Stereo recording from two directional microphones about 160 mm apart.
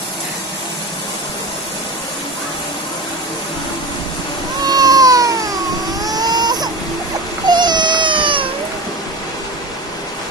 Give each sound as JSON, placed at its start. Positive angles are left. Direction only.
{"t": 4.6, "sound": "a sound", "side_deg": -25}
{"t": 6.0, "sound": "vehicle", "side_deg": -25}
{"t": 7.4, "sound": "baby cry", "side_deg": -25}